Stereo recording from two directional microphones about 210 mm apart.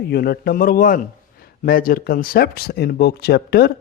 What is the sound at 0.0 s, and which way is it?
A man's voice, 50° left (ahead or behind).